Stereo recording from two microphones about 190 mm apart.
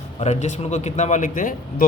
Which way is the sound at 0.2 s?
35° left (ahead or behind).